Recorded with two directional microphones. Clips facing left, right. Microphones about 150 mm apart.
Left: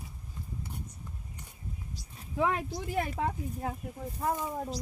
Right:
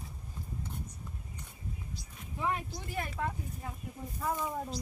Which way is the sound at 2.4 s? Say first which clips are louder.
Left 5 dB; 90° left.